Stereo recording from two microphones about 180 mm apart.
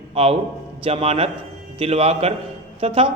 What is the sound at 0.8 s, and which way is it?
A man's voice, 30° right (ahead or behind).